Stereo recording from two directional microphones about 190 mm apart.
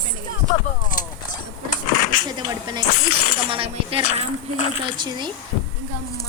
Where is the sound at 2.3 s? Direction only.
20° right (ahead or behind).